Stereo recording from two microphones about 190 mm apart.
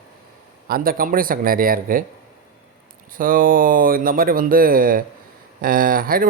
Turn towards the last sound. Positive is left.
turn(degrees=-50)  # may be behind; listen again after turning